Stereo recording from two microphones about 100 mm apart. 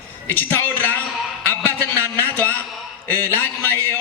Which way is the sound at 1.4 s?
20° left (ahead or behind).